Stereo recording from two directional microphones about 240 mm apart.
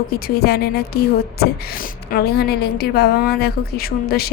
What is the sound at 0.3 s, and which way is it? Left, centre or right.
Speech, left.